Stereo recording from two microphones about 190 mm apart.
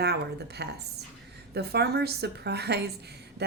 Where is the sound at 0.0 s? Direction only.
60° right (ahead or behind).